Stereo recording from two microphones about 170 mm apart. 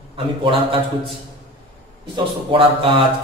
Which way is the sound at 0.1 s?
30° right (ahead or behind).